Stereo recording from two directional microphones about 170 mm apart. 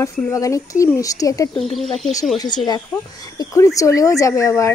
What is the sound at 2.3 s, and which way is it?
Speech, 25° left (ahead or behind).